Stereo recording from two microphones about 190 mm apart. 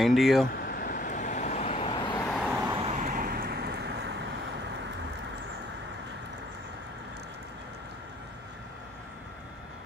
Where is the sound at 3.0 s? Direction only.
45° right (ahead or behind); by 4.3 s 65° right (ahead or behind).